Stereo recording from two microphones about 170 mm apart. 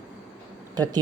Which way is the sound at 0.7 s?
25° right (ahead or behind).